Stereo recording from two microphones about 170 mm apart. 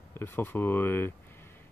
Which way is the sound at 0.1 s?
10° left (ahead or behind).